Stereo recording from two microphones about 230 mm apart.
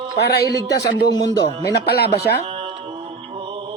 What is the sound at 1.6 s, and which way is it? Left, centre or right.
Speech, left.